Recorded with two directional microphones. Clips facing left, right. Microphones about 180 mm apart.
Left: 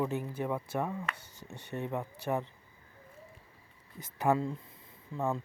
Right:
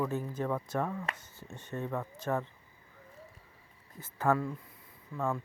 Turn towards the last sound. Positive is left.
turn(degrees=20)  # may be behind; listen again after turning